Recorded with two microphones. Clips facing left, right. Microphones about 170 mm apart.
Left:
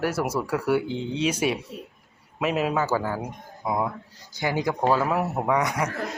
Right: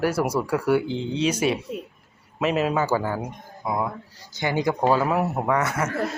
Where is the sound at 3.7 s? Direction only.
20° left (ahead or behind).